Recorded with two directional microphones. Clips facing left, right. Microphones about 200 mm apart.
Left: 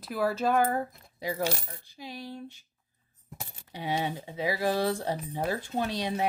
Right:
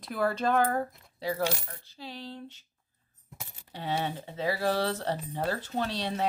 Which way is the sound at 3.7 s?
10° left (ahead or behind).